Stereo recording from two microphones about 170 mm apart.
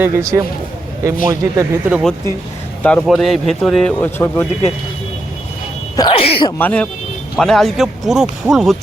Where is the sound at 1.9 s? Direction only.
5° right (ahead or behind).